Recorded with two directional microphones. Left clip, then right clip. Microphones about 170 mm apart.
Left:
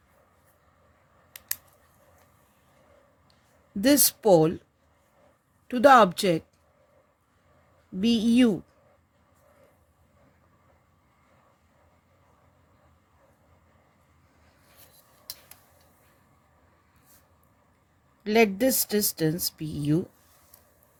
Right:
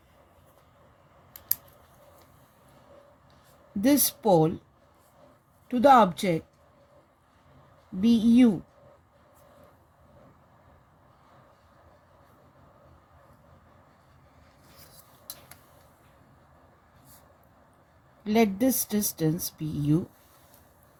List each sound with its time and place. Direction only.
3.8 s speech: 50° left (ahead or behind)
5.6 s speech: 50° left (ahead or behind)
8.0 s speech: 50° left (ahead or behind)
18.2 s speech: 45° left (ahead or behind)